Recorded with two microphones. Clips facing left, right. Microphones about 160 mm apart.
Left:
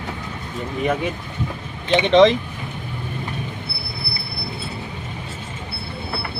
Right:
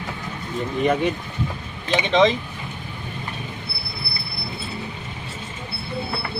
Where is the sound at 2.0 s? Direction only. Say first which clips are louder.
Left 5 dB; 65° left (ahead or behind).